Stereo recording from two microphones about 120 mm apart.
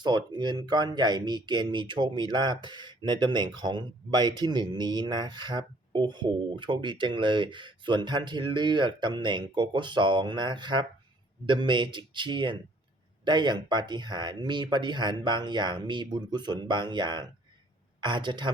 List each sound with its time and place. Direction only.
0.0 s speech: 35° right (ahead or behind)